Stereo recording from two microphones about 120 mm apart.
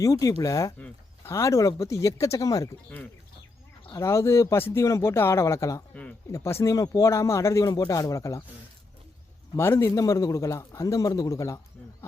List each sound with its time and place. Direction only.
0.0 s a man's voice: 25° left (ahead or behind)
3.9 s a man's voice: 25° left (ahead or behind)
5.9 s speech: 10° left (ahead or behind)
6.3 s a man's voice: 25° left (ahead or behind)
9.6 s a man's voice: 20° left (ahead or behind)